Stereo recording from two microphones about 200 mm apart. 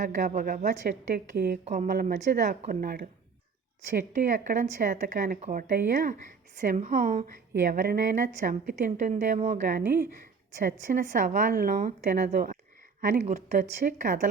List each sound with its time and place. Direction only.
0.0 s a woman's voice: 40° right (ahead or behind)
1.9 s a woman's voice: 50° right (ahead or behind)